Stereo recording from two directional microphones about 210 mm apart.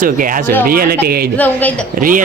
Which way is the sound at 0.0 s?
40° right (ahead or behind).